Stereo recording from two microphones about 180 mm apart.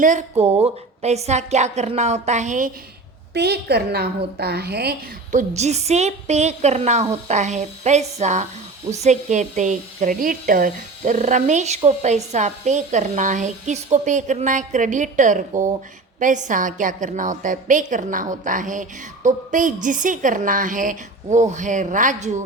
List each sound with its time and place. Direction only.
0.0 s a woman's voice: 45° right (ahead or behind)
3.3 s a woman's voice: 65° right (ahead or behind)
5.3 s a woman's voice: 40° right (ahead or behind)